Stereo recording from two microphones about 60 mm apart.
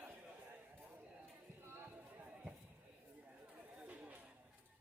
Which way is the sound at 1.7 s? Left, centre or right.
Right.